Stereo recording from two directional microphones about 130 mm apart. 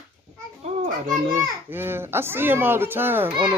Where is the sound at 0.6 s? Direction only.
60° right (ahead or behind).